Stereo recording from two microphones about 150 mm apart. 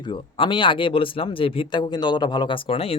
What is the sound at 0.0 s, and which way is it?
A man's voice, 30° left (ahead or behind).